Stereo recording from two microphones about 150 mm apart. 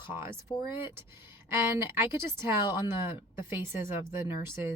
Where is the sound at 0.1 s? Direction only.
15° right (ahead or behind).